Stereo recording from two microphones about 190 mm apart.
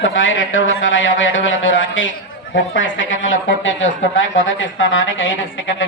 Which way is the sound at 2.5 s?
75° left (ahead or behind).